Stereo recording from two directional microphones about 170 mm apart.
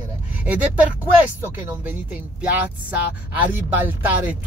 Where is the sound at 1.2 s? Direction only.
15° right (ahead or behind).